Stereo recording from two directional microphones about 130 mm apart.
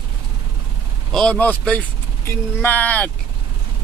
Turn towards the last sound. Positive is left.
turn(degrees=10)  # may be behind; listen again after turning